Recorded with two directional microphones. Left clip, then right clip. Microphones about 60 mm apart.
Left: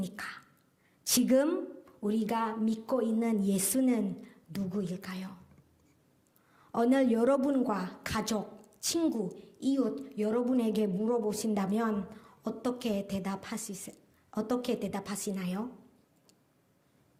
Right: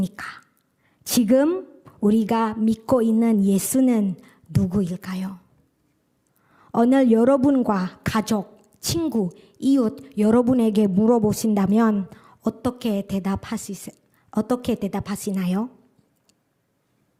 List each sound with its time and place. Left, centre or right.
0.0 s a woman's voice: right
3.2 s a woman's voice: right
6.5 s speech: right
9.5 s speech: right
10.6 s a woman's voice: right
12.1 s a sound: right
12.4 s a woman's voice: right